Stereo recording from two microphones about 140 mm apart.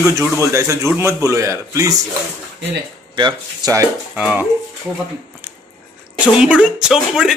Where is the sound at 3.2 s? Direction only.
35° right (ahead or behind).